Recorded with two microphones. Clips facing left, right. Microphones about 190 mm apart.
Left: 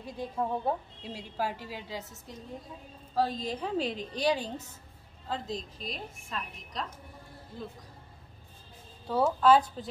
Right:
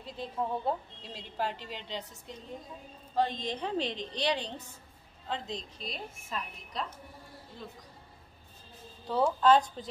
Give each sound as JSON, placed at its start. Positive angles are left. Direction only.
{"t": 0.0, "sound": "a woman's voice", "side_deg": 10}
{"t": 3.2, "sound": "a woman's voice", "side_deg": 5}
{"t": 5.6, "sound": "a woman's voice", "side_deg": 0}
{"t": 9.0, "sound": "a woman's voice", "side_deg": 10}